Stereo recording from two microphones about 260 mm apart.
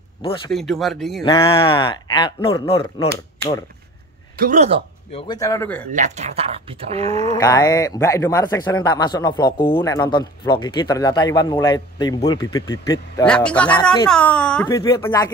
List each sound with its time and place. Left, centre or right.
0.5 s speech: centre
1.2 s speech: centre
4.4 s speech: right
5.1 s speech: centre
5.9 s speech: right
7.3 s speech: centre